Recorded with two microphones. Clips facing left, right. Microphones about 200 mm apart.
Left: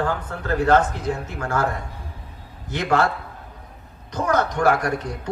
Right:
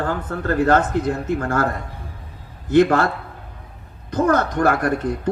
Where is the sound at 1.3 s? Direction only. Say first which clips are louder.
Even; 55° right (ahead or behind).